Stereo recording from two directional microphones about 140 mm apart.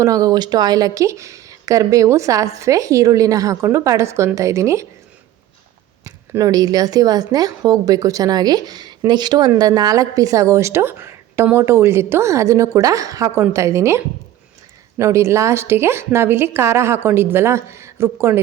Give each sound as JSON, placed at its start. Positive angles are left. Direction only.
{"t": 0.0, "sound": "speech", "side_deg": -25}
{"t": 6.1, "sound": "a woman's voice", "side_deg": -25}